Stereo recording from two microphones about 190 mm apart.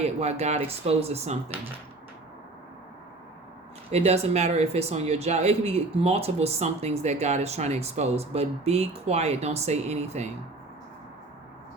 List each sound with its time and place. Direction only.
0.0 s speech: 35° right (ahead or behind)
3.9 s speech: 35° right (ahead or behind)